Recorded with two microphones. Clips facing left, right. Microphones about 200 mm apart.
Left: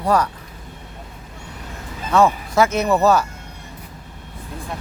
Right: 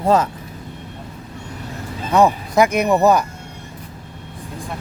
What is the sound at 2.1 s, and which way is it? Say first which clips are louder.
Speech: right 1 dB; 15° right (ahead or behind).